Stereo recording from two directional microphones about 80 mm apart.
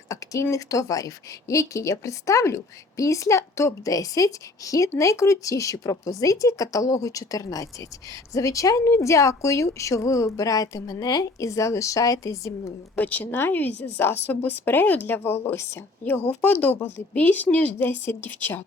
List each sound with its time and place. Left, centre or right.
0.5 s a woman's voice: left
13.0 s a woman's voice: centre
16.0 s a woman's voice: centre